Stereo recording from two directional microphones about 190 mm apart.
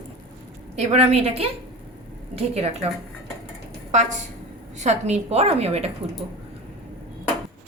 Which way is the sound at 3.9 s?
40° right (ahead or behind).